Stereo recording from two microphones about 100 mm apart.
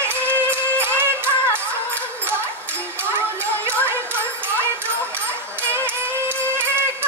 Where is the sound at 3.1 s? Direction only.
25° right (ahead or behind).